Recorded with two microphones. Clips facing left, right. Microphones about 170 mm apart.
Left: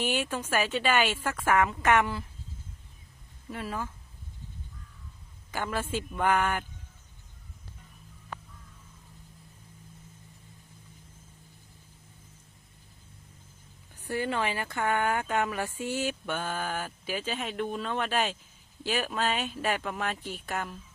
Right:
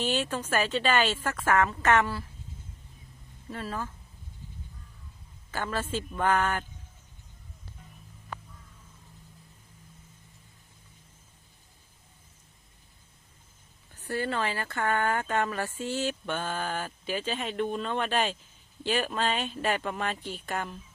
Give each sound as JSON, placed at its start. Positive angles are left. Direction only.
{"t": 0.0, "sound": "speech", "side_deg": 10}
{"t": 3.5, "sound": "speech", "side_deg": 15}
{"t": 5.5, "sound": "speech", "side_deg": 15}
{"t": 14.0, "sound": "speech", "side_deg": 15}